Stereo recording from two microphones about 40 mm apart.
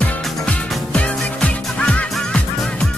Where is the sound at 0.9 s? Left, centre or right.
Left.